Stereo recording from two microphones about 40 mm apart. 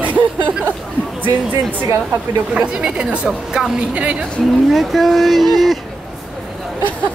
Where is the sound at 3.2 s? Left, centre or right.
Centre.